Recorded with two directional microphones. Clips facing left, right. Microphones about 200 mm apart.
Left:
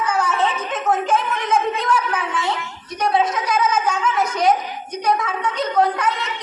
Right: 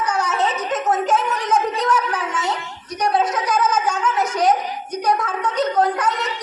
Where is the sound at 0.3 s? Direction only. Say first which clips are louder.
Even; 40° right (ahead or behind).